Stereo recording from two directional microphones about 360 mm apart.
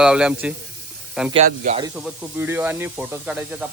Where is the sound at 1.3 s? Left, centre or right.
Centre.